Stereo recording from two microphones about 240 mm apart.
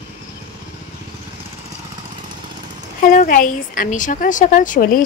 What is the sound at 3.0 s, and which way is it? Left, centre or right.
A woman's voice, left.